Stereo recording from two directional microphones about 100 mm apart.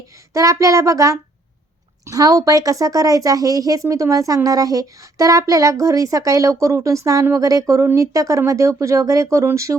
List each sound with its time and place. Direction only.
0.3 s speech: 35° right (ahead or behind)